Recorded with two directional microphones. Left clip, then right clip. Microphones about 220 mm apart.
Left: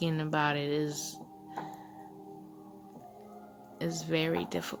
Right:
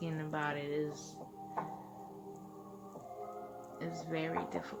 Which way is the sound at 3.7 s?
45° left (ahead or behind).